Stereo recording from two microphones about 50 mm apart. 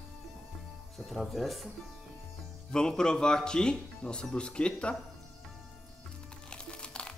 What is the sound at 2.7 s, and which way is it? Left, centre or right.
Speech, centre.